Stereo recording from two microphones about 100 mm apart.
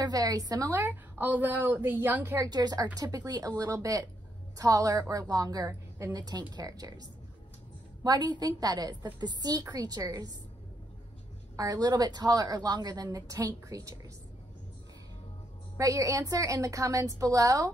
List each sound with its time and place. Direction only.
0.0 s a woman's voice: 40° right (ahead or behind)
0.7 s a woman's voice: 20° right (ahead or behind)
2.4 s a woman's voice: 40° right (ahead or behind)
5.7 s a sound: 25° right (ahead or behind)
6.1 s a woman's voice: 40° right (ahead or behind)
11.5 s a woman's voice: 40° right (ahead or behind)
15.8 s a woman's voice: 35° right (ahead or behind)